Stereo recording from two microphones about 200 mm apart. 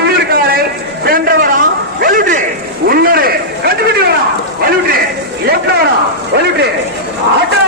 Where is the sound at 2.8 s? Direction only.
50° right (ahead or behind).